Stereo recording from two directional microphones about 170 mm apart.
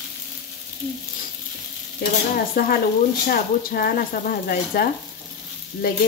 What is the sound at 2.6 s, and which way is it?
Speech, 65° left (ahead or behind).